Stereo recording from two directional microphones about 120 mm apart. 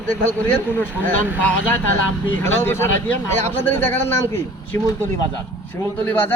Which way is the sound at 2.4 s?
20° left (ahead or behind).